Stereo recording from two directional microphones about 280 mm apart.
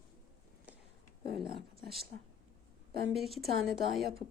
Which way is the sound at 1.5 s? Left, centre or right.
Left.